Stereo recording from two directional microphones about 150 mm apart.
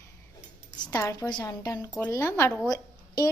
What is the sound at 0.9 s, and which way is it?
A woman's voice, 20° left (ahead or behind).